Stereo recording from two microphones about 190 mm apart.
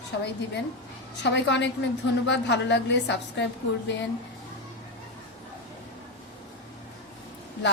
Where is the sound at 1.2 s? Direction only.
70° left (ahead or behind).